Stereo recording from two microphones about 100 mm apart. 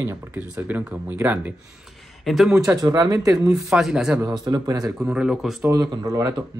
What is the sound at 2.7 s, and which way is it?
Speech, 40° right (ahead or behind).